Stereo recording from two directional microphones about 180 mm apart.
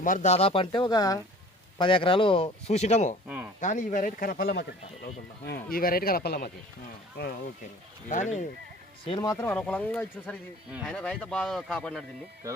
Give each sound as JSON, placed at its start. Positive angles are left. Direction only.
{"t": 0.0, "sound": "speech", "side_deg": 45}
{"t": 3.2, "sound": "speech", "side_deg": -10}
{"t": 3.6, "sound": "speech", "side_deg": 45}
{"t": 5.7, "sound": "speech", "side_deg": 55}
{"t": 8.1, "sound": "speech", "side_deg": 45}
{"t": 9.0, "sound": "speech", "side_deg": 20}
{"t": 10.7, "sound": "speech", "side_deg": -5}
{"t": 10.9, "sound": "speech", "side_deg": 5}